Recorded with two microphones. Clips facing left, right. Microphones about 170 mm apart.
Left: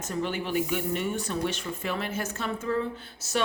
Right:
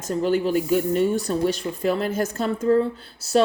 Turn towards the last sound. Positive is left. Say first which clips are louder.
# right 6 dB
turn(degrees=-35)  # may be behind; listen again after turning